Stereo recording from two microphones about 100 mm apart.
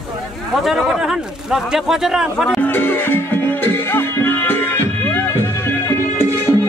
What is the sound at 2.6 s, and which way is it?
Music, 20° left (ahead or behind).